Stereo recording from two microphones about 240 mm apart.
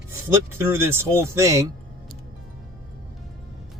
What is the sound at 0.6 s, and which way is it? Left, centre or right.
A man's voice, centre.